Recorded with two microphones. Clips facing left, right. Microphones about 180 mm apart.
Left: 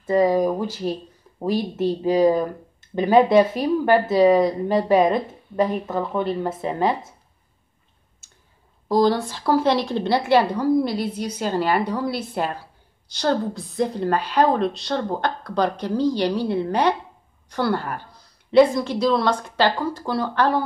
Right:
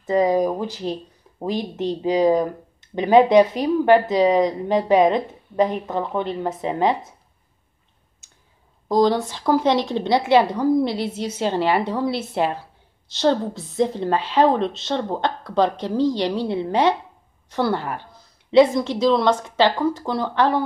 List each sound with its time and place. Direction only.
0.0 s speech: 15° right (ahead or behind)
8.9 s a woman's voice: 20° right (ahead or behind)